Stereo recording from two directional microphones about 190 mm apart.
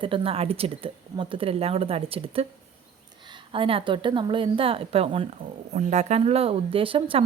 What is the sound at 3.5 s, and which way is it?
A woman's voice, 30° right (ahead or behind).